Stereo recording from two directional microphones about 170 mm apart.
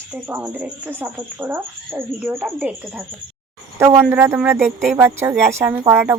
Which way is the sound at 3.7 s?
15° right (ahead or behind).